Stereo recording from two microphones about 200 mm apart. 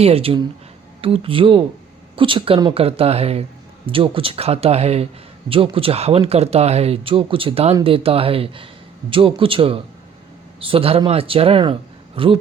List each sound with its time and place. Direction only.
0.0 s speech: 30° right (ahead or behind)